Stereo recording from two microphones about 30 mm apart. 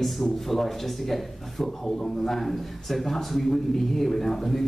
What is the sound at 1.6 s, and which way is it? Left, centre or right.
Speech, centre.